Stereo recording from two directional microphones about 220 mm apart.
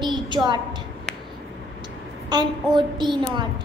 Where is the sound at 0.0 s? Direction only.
20° right (ahead or behind).